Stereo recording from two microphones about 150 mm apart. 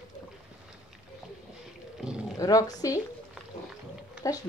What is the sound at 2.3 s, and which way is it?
Speech, 25° left (ahead or behind).